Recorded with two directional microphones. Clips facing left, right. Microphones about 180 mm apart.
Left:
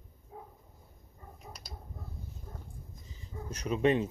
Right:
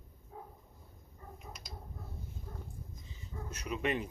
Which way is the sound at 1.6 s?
35° left (ahead or behind).